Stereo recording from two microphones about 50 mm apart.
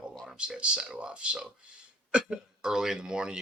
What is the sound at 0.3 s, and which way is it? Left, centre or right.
Speech, centre.